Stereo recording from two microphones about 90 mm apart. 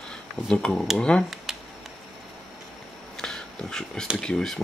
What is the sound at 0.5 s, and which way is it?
Speech, 5° left (ahead or behind).